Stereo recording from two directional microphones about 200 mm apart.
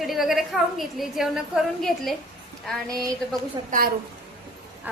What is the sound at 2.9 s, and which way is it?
Speech, 15° right (ahead or behind).